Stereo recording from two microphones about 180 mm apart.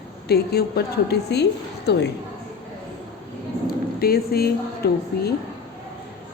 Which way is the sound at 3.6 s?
55° left (ahead or behind).